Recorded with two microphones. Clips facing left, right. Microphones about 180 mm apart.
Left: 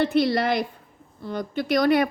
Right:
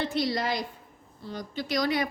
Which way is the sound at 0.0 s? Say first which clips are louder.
Left 7 dB; 60° left (ahead or behind).